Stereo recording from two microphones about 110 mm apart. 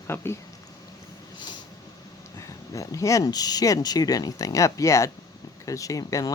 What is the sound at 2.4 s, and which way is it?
Speech, 30° left (ahead or behind).